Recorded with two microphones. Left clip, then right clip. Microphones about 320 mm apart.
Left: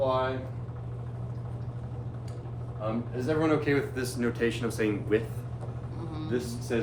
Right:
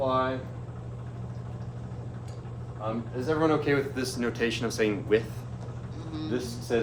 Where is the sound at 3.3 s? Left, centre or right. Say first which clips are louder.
Right 1 dB; centre.